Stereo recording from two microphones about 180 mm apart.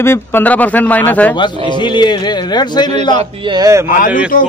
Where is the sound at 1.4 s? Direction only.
25° left (ahead or behind).